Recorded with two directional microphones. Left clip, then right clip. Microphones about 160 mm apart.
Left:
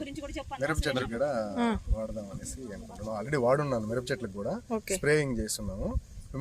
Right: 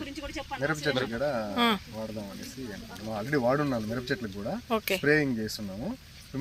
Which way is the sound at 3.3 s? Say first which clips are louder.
Even; 45° left (ahead or behind).